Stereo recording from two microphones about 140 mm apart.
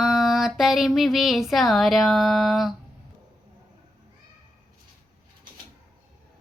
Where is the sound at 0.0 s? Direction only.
5° right (ahead or behind).